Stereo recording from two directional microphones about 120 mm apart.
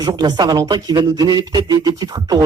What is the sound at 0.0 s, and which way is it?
Speech, 35° right (ahead or behind).